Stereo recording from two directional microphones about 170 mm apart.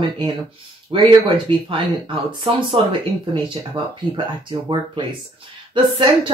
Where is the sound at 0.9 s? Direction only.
30° right (ahead or behind).